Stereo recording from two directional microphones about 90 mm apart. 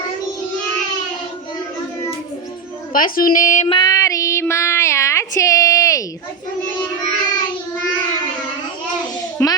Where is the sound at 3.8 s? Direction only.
40° left (ahead or behind).